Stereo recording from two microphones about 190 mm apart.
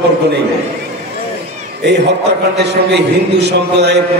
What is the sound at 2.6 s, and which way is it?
A man's voice, 65° right (ahead or behind).